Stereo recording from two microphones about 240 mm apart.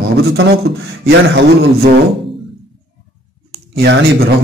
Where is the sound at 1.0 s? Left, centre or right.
Right.